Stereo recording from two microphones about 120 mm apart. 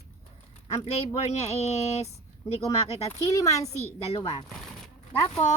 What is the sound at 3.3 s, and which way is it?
Speech, 25° left (ahead or behind).